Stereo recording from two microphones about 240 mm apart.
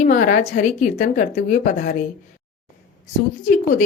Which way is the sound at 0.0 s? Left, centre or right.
Left.